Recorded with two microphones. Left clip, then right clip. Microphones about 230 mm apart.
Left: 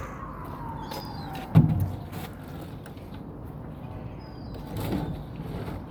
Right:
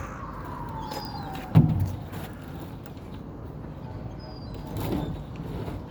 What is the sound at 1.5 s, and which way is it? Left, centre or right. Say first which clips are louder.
Vehicle: even; centre.